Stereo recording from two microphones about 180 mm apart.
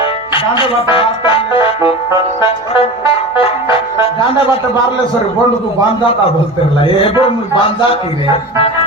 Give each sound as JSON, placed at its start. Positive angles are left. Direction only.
{"t": 0.3, "sound": "music", "side_deg": 30}
{"t": 6.8, "sound": "a man's voice", "side_deg": 30}